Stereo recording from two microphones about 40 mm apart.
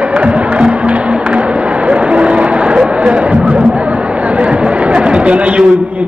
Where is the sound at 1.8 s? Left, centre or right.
Right.